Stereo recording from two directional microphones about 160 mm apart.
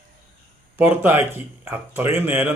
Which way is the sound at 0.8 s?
10° right (ahead or behind).